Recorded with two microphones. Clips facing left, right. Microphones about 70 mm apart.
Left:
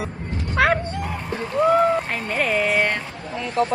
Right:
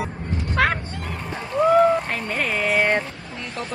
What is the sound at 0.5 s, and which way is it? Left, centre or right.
Speech, centre.